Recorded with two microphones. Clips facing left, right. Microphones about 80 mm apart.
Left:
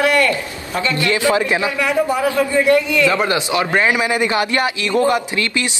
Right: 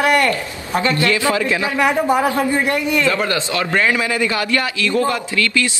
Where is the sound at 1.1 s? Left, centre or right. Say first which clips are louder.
Left 1 dB; left.